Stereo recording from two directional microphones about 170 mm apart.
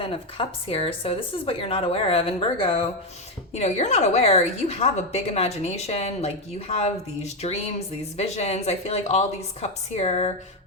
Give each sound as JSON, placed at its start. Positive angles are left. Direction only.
{"t": 0.0, "sound": "a woman's voice", "side_deg": 30}